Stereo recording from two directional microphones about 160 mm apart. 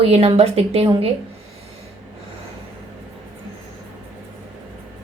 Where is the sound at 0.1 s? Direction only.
40° right (ahead or behind).